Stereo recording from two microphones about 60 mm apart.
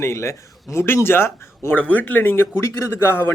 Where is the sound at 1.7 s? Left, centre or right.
Left.